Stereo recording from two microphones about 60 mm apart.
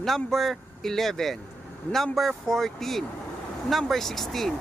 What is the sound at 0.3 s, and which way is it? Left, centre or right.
Speech, centre.